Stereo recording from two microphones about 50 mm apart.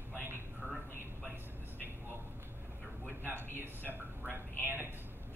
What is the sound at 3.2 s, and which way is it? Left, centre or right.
Speech, right.